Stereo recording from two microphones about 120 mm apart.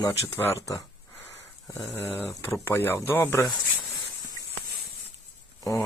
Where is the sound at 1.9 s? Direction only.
15° left (ahead or behind).